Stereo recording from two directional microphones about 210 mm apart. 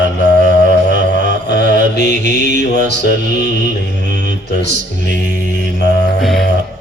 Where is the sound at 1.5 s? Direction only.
55° left (ahead or behind).